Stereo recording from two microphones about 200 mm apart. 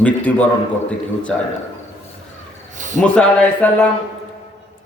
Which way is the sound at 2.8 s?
40° right (ahead or behind).